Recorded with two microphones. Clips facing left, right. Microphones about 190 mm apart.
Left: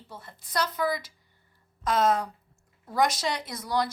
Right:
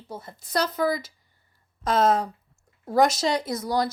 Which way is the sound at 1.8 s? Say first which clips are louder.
Right 3 dB; 30° right (ahead or behind).